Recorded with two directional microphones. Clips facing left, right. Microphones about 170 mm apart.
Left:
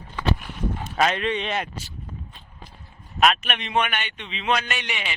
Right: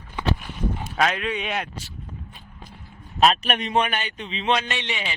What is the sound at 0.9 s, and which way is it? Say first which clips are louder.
Speech: left 2 dB; centre (ahead or behind).